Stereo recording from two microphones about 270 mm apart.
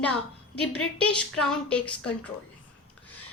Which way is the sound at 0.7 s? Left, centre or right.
Centre.